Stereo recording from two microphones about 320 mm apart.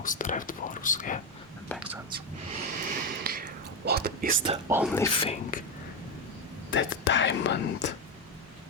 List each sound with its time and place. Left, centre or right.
0.0 s speech: left
1.7 s speech: centre
2.0 s speech: right
4.4 s speech: centre
5.2 s speech: centre
6.7 s speech: left